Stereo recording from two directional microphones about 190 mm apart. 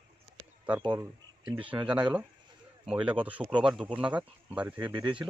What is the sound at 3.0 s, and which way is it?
Speech, 10° right (ahead or behind).